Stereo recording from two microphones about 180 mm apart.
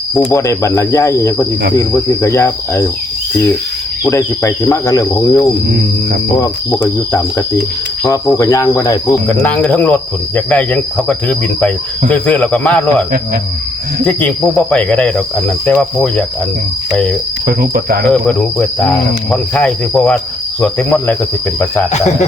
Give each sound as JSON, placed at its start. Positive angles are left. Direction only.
{"t": 0.1, "sound": "speech", "side_deg": 15}
{"t": 4.1, "sound": "speech", "side_deg": 15}
{"t": 9.2, "sound": "speech", "side_deg": 10}
{"t": 16.9, "sound": "cricket", "side_deg": 5}
{"t": 17.4, "sound": "speech", "side_deg": -55}
{"t": 18.1, "sound": "speech", "side_deg": 5}